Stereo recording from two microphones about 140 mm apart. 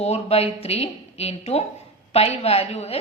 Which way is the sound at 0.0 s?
50° left (ahead or behind).